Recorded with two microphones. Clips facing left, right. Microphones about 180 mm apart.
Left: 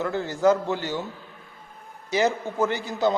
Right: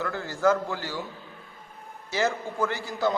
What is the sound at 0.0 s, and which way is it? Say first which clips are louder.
A man's voice: left 3 dB; 20° left (ahead or behind).